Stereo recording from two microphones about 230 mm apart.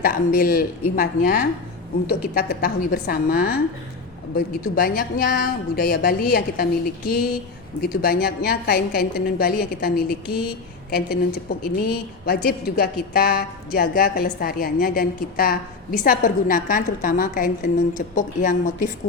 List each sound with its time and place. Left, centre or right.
0.0 s a woman's voice: left
7.8 s a woman's voice: left